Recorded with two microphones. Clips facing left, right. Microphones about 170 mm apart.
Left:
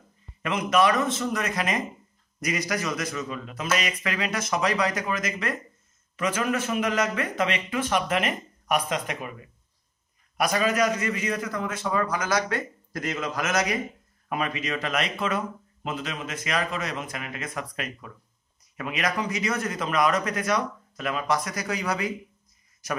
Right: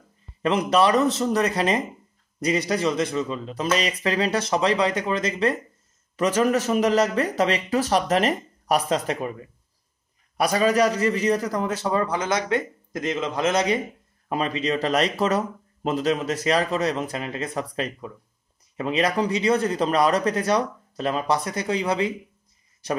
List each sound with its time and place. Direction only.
0.4 s speech: 35° right (ahead or behind)